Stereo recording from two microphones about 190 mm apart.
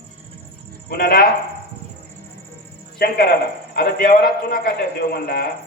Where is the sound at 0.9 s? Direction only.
55° left (ahead or behind).